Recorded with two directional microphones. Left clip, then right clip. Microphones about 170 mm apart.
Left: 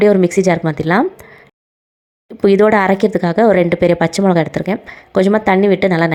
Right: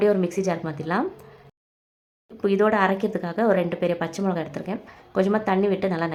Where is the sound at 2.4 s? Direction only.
35° left (ahead or behind).